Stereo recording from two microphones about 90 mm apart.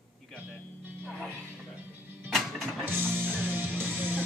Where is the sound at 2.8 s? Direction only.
25° right (ahead or behind).